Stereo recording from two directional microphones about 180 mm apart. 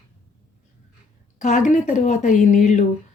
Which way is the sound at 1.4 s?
40° left (ahead or behind).